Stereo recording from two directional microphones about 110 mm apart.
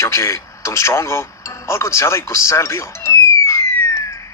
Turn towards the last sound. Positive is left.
turn(degrees=30)  # may be behind; listen again after turning